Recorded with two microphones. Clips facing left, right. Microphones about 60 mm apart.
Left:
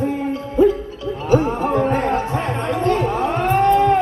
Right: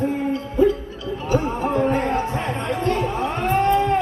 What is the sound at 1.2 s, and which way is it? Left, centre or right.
Chatter, left.